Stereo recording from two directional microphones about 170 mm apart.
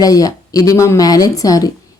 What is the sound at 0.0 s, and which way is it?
A woman's voice, 20° left (ahead or behind).